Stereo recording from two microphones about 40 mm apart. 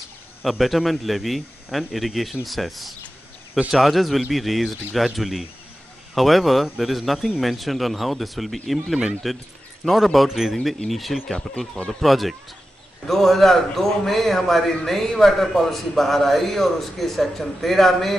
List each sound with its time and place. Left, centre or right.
0.4 s a man's voice: centre
11.3 s speech: centre
11.9 s a man's voice: centre